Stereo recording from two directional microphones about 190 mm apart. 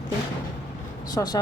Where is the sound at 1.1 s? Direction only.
20° left (ahead or behind).